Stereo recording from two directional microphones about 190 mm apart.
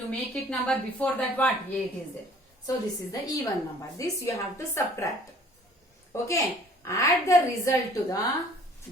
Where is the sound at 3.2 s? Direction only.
20° left (ahead or behind).